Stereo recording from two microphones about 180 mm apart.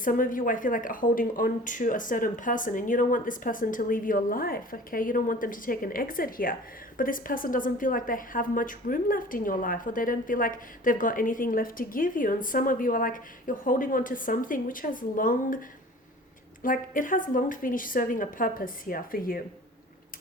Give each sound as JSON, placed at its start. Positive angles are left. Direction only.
{"t": 0.0, "sound": "speech", "side_deg": 50}
{"t": 16.6, "sound": "speech", "side_deg": 50}